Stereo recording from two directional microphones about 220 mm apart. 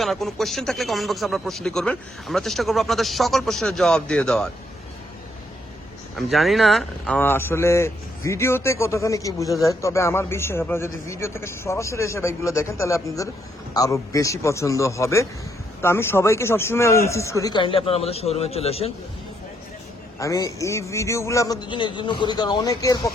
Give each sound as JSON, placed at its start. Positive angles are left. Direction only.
{"t": 0.0, "sound": "speech", "side_deg": 0}
{"t": 6.1, "sound": "speech", "side_deg": 0}
{"t": 20.1, "sound": "speech", "side_deg": 15}